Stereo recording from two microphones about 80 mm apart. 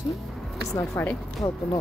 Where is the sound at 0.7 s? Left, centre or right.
Left.